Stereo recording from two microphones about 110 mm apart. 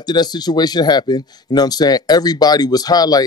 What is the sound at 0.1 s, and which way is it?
Speech, 40° left (ahead or behind).